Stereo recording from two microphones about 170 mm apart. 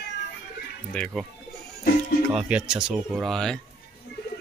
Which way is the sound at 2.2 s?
5° right (ahead or behind).